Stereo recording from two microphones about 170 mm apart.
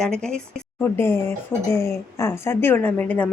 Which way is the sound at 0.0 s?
5° left (ahead or behind).